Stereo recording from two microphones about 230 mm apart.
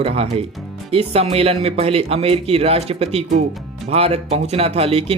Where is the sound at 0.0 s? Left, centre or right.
Right.